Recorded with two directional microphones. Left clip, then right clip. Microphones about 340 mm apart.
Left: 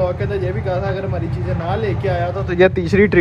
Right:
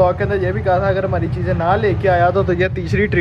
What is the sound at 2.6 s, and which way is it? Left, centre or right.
Speech, centre.